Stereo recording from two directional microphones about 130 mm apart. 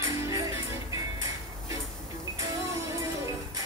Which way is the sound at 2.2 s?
25° right (ahead or behind).